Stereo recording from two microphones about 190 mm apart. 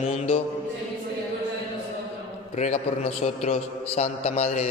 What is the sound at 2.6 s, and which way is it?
A man's voice, 35° left (ahead or behind).